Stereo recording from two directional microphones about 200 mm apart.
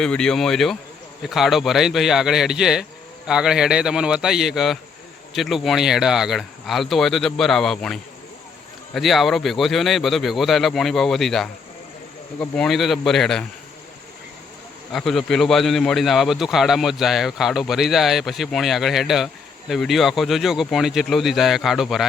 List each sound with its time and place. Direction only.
0.0 s a man's voice: 5° left (ahead or behind)
14.9 s a man's voice: centre (ahead or behind)